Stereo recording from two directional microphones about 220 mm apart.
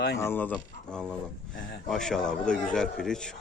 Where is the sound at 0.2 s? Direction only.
10° left (ahead or behind).